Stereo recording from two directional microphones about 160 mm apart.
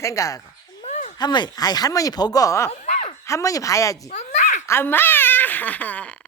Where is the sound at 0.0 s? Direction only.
20° left (ahead or behind).